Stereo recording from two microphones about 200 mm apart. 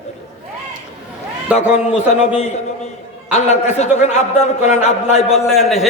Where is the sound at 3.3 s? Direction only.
35° left (ahead or behind).